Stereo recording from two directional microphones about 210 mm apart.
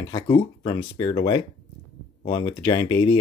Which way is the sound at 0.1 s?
25° left (ahead or behind).